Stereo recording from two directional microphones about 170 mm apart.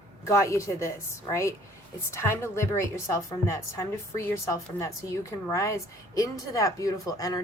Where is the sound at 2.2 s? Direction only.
15° left (ahead or behind).